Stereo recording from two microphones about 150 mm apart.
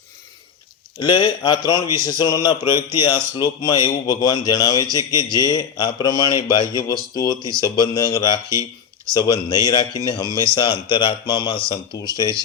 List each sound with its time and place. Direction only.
0.9 s speech: 30° left (ahead or behind)